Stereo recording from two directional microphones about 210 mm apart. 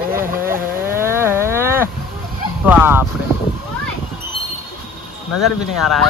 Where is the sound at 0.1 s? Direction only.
40° right (ahead or behind).